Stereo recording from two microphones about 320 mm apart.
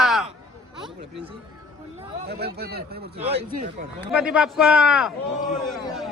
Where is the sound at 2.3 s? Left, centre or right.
Right.